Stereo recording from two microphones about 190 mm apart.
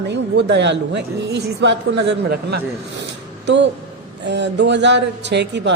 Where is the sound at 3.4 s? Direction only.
70° right (ahead or behind).